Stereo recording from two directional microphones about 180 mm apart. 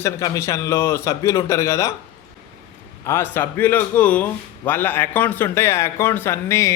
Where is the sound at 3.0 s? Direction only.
15° left (ahead or behind).